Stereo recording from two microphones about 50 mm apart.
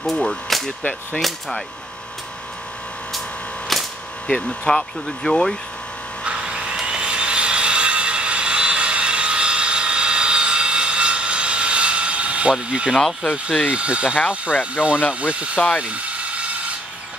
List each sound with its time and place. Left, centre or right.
0.0 s speech: centre
3.7 s cap gun: centre
4.3 s speech: centre
6.2 s a sound: centre
12.9 s speech: centre
13.7 s speech: right
15.8 s mechanisms: right